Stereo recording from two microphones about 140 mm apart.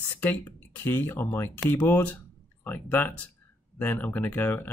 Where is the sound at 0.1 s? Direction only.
15° left (ahead or behind).